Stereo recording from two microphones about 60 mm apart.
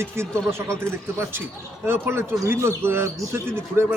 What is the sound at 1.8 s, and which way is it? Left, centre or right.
A man's voice, right.